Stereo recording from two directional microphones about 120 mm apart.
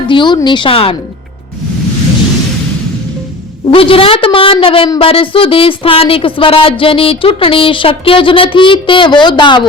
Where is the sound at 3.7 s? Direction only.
50° left (ahead or behind).